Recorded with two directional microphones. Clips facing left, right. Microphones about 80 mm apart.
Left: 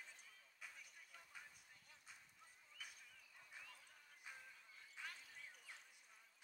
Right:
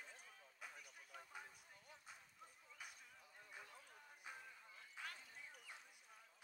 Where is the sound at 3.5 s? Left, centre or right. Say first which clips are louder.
Right 2 dB; right.